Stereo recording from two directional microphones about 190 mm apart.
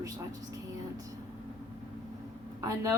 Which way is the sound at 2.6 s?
15° right (ahead or behind).